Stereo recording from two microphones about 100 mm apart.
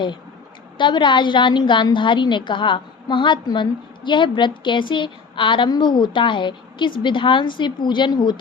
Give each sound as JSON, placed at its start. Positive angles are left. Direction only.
{"t": 0.8, "sound": "a woman's voice", "side_deg": 50}